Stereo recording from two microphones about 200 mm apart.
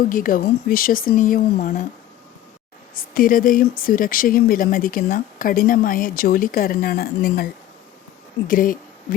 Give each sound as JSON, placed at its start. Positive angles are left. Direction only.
{"t": 0.1, "sound": "speech", "side_deg": 45}
{"t": 2.9, "sound": "speech", "side_deg": 45}
{"t": 8.4, "sound": "speech", "side_deg": 45}